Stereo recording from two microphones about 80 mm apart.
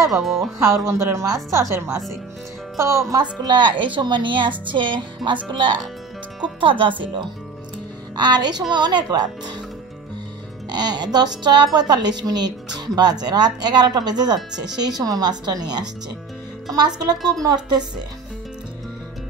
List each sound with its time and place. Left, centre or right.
0.2 s speech: centre
0.6 s a woman's voice: right
3.2 s a woman's voice: right
8.2 s speech: right
10.7 s speech: right